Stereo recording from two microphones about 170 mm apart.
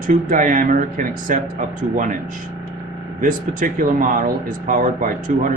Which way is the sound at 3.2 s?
50° right (ahead or behind).